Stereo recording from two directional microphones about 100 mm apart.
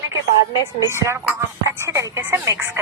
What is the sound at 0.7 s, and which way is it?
Speech, 30° right (ahead or behind).